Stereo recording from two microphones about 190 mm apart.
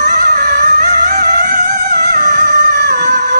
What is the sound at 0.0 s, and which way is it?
Music, 50° right (ahead or behind).